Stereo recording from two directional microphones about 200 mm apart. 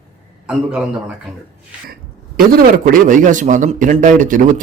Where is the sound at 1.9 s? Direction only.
45° right (ahead or behind).